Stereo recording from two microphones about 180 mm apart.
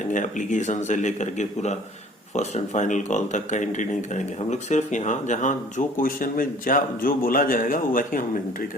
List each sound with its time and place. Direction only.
0.1 s speech: 45° left (ahead or behind)